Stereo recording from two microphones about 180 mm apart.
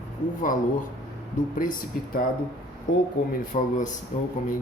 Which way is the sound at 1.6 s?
50° left (ahead or behind).